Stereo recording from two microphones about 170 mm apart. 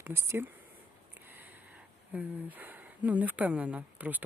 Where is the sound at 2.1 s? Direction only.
10° right (ahead or behind).